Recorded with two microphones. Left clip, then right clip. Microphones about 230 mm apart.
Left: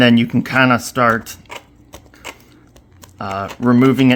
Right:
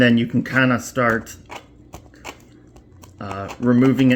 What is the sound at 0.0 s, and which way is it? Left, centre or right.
Speech, left.